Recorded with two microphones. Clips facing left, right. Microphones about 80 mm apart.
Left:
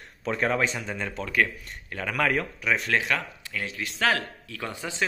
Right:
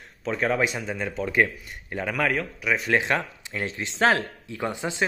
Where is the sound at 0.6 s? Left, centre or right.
Centre.